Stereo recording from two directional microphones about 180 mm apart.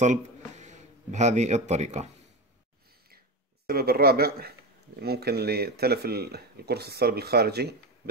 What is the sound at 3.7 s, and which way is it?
Speech, 60° right (ahead or behind).